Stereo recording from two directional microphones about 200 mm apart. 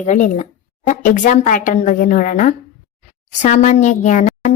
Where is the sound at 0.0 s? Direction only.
35° left (ahead or behind).